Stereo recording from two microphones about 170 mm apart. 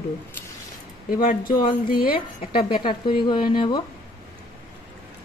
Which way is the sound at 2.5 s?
30° left (ahead or behind).